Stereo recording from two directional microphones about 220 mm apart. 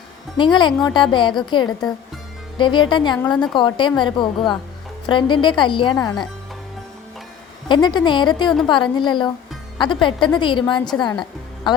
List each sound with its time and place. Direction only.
0.3 s a woman's voice: 20° left (ahead or behind)
7.7 s a woman's voice: 20° left (ahead or behind)